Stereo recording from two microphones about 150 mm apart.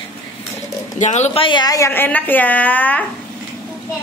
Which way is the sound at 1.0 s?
50° left (ahead or behind).